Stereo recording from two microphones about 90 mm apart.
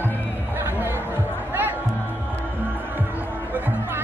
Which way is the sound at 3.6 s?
20° right (ahead or behind).